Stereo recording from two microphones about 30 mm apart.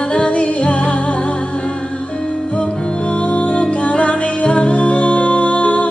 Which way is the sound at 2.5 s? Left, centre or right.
Left.